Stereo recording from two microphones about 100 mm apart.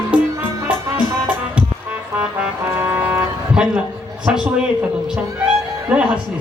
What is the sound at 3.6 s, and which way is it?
A man's voice, 10° right (ahead or behind).